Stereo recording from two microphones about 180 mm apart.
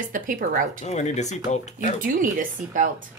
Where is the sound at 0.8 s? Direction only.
40° left (ahead or behind).